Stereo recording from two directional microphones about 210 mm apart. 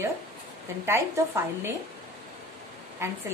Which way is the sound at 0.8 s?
10° right (ahead or behind).